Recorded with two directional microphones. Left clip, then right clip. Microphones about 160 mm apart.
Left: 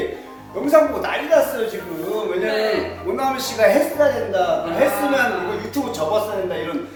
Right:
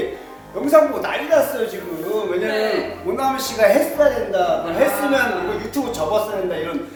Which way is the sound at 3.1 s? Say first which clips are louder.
Right 1 dB; 15° right (ahead or behind).